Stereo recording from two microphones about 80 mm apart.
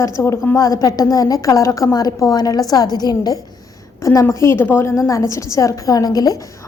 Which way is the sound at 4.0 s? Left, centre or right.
Left.